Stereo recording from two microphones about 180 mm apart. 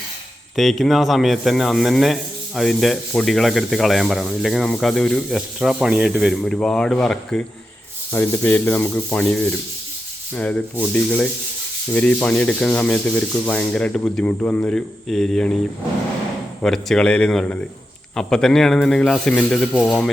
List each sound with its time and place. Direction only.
0.5 s speech: centre (ahead or behind)
8.1 s rub: 10° left (ahead or behind)
11.9 s speech: 5° left (ahead or behind)
16.6 s speech: 5° left (ahead or behind)